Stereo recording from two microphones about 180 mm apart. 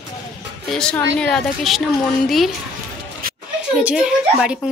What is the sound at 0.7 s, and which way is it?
A woman's voice, 5° left (ahead or behind).